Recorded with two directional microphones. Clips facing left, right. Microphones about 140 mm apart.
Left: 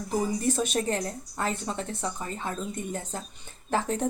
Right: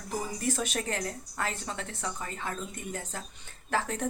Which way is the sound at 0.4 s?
25° left (ahead or behind).